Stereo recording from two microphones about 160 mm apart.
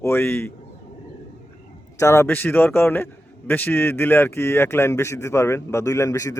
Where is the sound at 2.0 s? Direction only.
15° left (ahead or behind).